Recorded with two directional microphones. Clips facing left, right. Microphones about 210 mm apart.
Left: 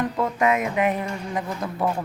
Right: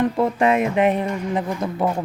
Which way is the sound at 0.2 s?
30° right (ahead or behind).